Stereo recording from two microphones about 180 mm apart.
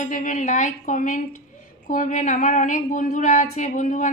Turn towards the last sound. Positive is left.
turn(degrees=45)  # may be behind; listen again after turning